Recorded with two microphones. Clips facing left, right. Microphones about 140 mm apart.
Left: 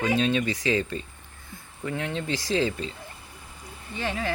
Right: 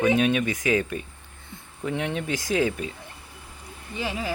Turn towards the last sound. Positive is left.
turn(degrees=-10)  # may be behind; listen again after turning